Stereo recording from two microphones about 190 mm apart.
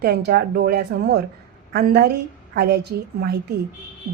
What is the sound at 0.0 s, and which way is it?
Speech, 55° right (ahead or behind).